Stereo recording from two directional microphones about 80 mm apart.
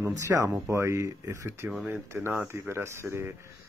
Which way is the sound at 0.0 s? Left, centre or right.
Right.